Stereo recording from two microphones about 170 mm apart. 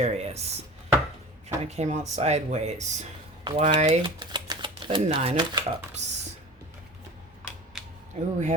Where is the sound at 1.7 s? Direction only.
40° right (ahead or behind).